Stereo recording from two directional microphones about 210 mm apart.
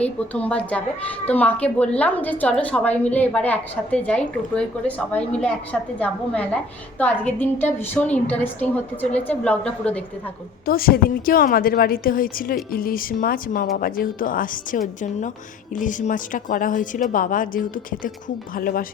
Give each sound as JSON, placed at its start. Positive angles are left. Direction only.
{"t": 0.0, "sound": "a woman's voice", "side_deg": 5}
{"t": 10.7, "sound": "a woman's voice", "side_deg": 45}